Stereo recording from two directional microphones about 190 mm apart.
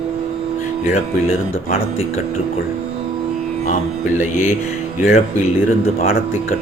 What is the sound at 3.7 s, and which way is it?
Speech, 40° left (ahead or behind).